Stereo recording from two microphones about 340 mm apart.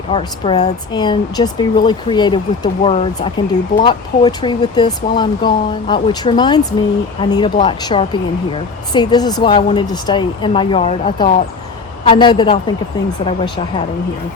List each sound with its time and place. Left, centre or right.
0.1 s speech: centre